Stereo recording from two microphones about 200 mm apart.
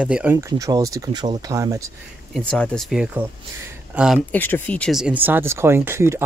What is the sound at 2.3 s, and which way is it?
Speech, centre (ahead or behind).